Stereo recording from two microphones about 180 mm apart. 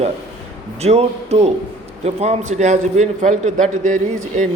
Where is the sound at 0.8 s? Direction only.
35° right (ahead or behind).